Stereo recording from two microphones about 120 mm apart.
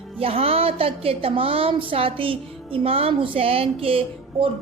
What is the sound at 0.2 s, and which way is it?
A woman's voice, 55° right (ahead or behind).